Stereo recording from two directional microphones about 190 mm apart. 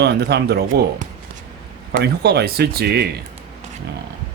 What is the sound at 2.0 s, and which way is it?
Speech, 60° right (ahead or behind).